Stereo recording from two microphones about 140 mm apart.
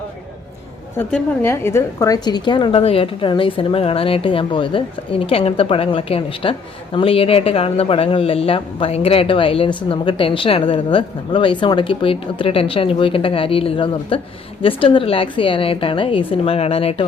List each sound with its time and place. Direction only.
0.9 s a woman's voice: 15° left (ahead or behind); by 17.1 s 45° left (ahead or behind)